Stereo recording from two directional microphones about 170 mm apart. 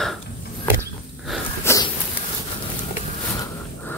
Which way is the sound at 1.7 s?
15° left (ahead or behind).